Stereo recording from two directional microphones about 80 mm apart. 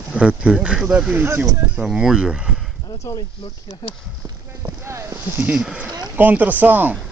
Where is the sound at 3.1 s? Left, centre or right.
Left.